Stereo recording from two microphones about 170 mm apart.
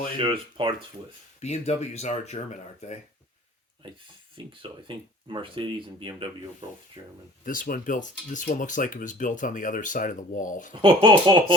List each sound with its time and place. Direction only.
0.2 s speech: 30° right (ahead or behind)
1.4 s speech: 40° left (ahead or behind)
4.4 s speech: 30° right (ahead or behind)
7.4 s speech: 55° left (ahead or behind)
10.8 s speech: 30° right (ahead or behind)